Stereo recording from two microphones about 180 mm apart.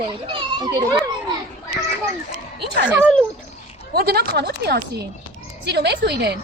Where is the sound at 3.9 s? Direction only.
65° right (ahead or behind).